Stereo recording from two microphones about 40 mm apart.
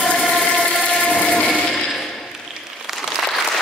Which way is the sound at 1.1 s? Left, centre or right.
Left.